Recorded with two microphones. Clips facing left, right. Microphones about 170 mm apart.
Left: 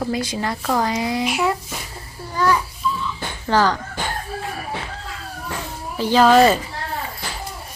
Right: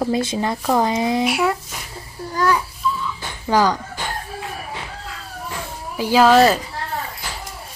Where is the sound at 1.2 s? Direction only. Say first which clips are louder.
Right 2 dB; 10° right (ahead or behind).